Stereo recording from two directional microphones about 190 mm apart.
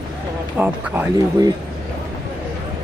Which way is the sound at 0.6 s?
5° right (ahead or behind).